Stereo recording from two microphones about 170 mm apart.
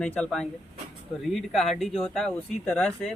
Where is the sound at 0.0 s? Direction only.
5° left (ahead or behind).